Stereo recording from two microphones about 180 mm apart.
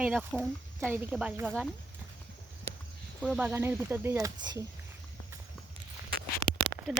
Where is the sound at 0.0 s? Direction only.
5° right (ahead or behind).